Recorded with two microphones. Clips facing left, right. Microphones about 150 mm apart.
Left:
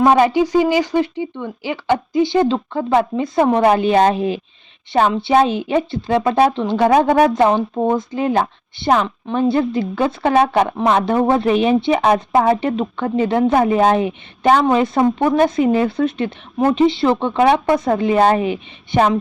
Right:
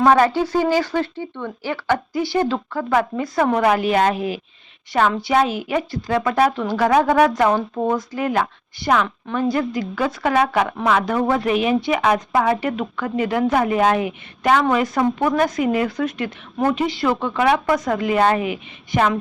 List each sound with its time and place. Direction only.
0.0 s speech: 15° left (ahead or behind); by 19.1 s 30° left (ahead or behind)